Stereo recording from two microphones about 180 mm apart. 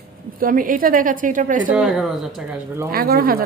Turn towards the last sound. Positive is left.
turn(degrees=-55)  # may be behind; listen again after turning